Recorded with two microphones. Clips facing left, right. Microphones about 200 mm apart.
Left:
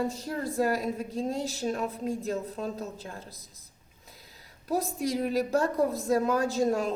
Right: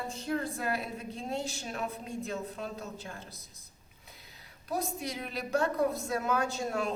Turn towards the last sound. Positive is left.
turn(degrees=40)  # may be behind; listen again after turning